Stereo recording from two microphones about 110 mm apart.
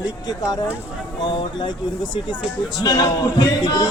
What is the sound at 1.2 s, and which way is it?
Speech, 45° left (ahead or behind).